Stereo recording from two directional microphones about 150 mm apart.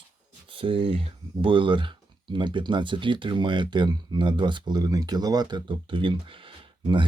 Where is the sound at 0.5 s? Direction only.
35° right (ahead or behind).